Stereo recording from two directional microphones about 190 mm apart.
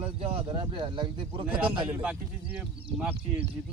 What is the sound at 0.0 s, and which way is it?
Speech, 30° right (ahead or behind).